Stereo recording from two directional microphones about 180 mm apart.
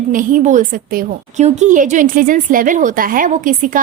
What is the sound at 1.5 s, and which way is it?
A woman's voice, 40° right (ahead or behind).